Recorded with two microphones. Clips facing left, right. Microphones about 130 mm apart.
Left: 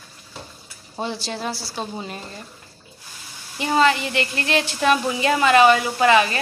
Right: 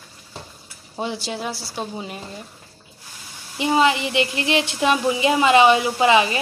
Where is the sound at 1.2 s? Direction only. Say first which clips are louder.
Even; 10° right (ahead or behind).